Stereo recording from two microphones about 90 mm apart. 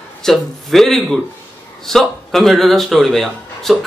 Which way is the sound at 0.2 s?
5° left (ahead or behind).